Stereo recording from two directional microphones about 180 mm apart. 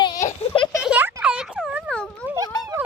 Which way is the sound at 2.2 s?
15° right (ahead or behind).